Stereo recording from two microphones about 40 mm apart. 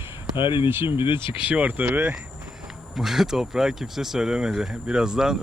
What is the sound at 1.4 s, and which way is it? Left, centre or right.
Speech, right.